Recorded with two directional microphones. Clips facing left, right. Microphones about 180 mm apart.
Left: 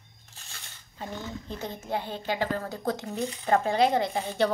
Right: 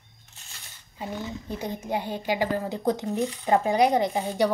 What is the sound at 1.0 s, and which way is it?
A woman's voice, 10° right (ahead or behind).